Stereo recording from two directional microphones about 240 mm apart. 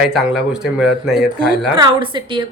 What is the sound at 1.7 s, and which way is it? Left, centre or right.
Speech, centre.